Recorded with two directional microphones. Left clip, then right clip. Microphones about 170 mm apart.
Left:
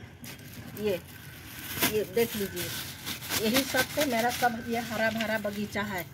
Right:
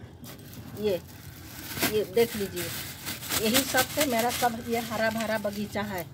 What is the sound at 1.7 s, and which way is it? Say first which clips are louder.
Speech: right 2 dB; 15° right (ahead or behind).